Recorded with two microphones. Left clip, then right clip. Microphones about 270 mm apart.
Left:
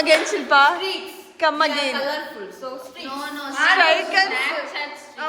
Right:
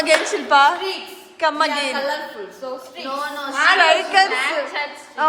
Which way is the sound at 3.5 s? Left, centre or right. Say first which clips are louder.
Right 2 dB; right.